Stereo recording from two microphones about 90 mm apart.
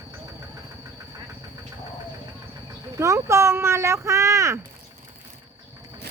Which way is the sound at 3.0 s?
35° right (ahead or behind).